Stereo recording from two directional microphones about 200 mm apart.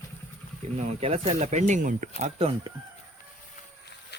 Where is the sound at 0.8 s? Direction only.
35° right (ahead or behind).